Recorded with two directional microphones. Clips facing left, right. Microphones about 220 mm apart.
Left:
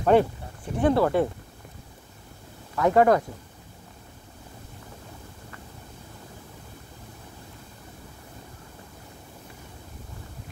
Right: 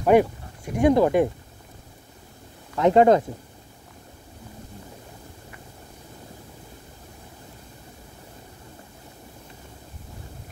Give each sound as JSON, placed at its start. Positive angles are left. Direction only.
{"t": 0.0, "sound": "speech", "side_deg": -15}
{"t": 2.7, "sound": "speech", "side_deg": -20}